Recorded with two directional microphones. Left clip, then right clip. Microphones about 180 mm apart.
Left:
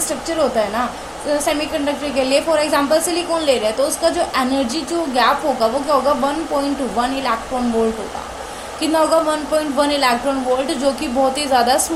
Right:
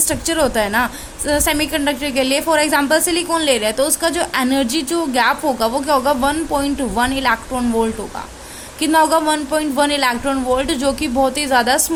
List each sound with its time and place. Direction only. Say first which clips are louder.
0.3 s a woman's voice: even; 55° right (ahead or behind)
8.8 s a woman's voice: right 1 dB; 45° right (ahead or behind)